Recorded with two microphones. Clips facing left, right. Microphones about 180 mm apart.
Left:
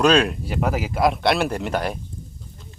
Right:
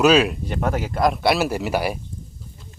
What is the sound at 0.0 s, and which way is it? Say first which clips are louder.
Speech: right 1 dB; 5° right (ahead or behind).